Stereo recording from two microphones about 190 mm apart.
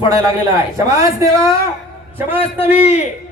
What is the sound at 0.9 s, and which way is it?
Speech, 15° right (ahead or behind).